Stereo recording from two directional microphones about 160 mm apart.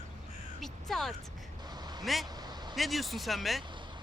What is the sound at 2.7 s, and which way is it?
Speech, centre (ahead or behind).